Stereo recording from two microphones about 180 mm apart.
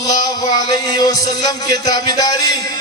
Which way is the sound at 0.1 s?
20° left (ahead or behind).